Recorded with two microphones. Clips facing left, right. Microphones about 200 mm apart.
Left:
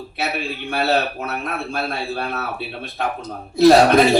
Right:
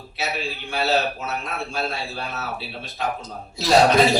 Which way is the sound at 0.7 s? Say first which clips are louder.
Left 2 dB; 55° left (ahead or behind).